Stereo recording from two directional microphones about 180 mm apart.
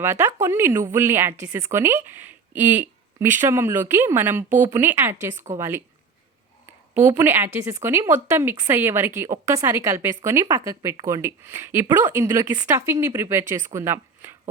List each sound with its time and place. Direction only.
0.0 s speech: 15° right (ahead or behind)
5.3 s a woman's voice: 40° right (ahead or behind)
5.5 s speech: 15° right (ahead or behind)